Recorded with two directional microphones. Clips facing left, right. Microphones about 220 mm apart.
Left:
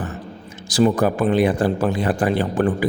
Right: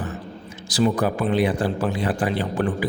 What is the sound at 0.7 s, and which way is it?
A man's voice, 50° left (ahead or behind).